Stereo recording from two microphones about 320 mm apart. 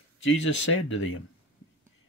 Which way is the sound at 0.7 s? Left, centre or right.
Left.